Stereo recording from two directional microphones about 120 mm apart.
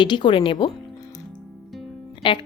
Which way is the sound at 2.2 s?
45° left (ahead or behind).